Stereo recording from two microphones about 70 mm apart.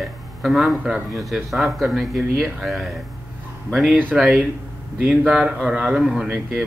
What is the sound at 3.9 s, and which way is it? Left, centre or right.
Speech, right.